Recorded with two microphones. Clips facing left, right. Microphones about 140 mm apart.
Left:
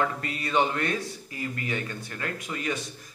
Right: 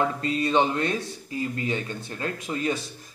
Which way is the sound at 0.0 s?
25° right (ahead or behind).